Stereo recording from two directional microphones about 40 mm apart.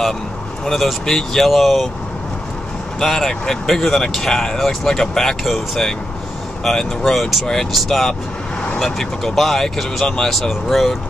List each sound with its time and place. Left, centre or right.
0.7 s speech: centre
3.0 s speech: centre
7.2 s speech: centre
10.0 s speech: centre
10.5 s speech: centre